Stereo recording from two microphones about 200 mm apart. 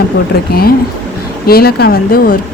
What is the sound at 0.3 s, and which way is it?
A woman's voice, 50° left (ahead or behind).